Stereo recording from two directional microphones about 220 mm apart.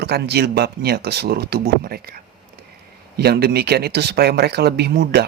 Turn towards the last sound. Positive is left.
turn(degrees=-50)  # may be behind; listen again after turning